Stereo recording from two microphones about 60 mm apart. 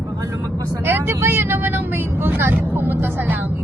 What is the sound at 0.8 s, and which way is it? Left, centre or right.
Speech, right.